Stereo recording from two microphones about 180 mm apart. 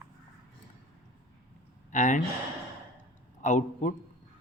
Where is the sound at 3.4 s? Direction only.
40° left (ahead or behind).